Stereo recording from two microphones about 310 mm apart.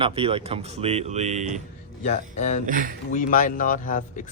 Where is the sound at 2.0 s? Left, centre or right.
Left.